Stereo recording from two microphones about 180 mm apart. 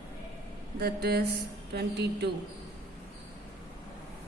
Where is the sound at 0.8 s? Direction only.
60° right (ahead or behind).